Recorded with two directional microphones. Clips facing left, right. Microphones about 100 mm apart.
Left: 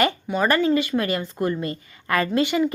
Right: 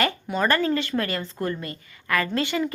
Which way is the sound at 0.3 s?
15° left (ahead or behind).